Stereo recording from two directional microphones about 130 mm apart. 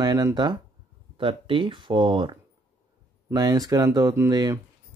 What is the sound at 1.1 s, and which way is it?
Speech, 40° right (ahead or behind).